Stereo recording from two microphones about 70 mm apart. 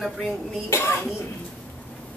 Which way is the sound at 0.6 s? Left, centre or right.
Left.